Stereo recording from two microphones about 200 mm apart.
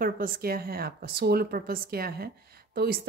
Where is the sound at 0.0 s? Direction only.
45° right (ahead or behind).